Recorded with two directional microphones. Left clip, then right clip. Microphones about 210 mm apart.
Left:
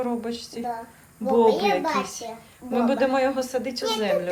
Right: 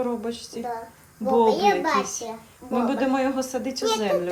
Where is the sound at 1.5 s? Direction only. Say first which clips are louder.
Right 1 dB; centre (ahead or behind).